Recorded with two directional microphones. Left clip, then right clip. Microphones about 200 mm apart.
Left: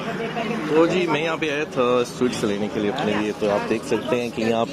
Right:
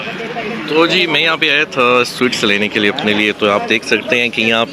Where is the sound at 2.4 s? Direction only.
15° right (ahead or behind).